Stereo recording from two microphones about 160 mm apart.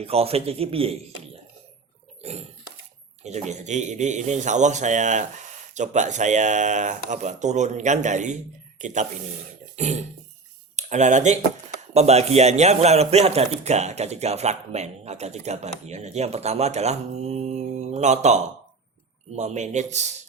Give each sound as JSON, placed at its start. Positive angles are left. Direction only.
{"t": 0.0, "sound": "speech", "side_deg": -40}
{"t": 2.2, "sound": "burping", "side_deg": -40}
{"t": 3.2, "sound": "a man's voice", "side_deg": -45}
{"t": 9.7, "sound": "music", "side_deg": -45}
{"t": 10.8, "sound": "a man's voice", "side_deg": -45}
{"t": 19.4, "sound": "a man's voice", "side_deg": -45}